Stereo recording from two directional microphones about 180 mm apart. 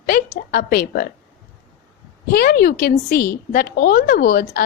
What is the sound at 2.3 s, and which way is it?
A woman's voice, 55° left (ahead or behind).